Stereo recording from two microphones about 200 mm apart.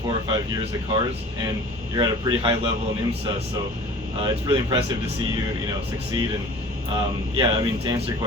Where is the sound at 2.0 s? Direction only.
25° right (ahead or behind).